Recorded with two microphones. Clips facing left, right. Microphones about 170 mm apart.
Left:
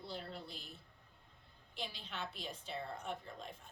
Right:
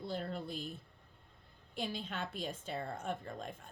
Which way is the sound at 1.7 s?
50° right (ahead or behind).